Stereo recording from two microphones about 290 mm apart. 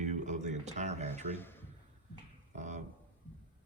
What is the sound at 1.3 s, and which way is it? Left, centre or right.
Speech, centre.